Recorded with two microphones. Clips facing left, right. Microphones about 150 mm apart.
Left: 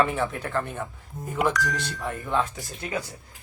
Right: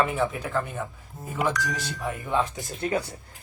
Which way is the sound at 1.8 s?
Centre (ahead or behind).